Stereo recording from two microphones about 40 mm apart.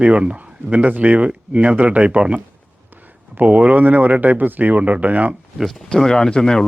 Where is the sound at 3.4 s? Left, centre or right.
Right.